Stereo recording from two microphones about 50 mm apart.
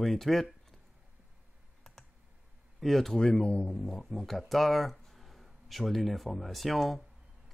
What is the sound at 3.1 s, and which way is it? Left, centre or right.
Speech, centre.